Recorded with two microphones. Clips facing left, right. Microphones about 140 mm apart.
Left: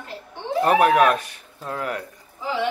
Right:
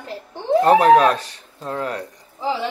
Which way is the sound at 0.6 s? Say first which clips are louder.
Right 3 dB; 30° right (ahead or behind).